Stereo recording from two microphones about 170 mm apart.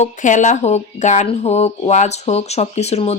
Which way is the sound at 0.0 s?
45° left (ahead or behind).